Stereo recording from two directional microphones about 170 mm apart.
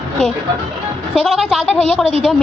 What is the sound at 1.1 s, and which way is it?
Speech, centre (ahead or behind).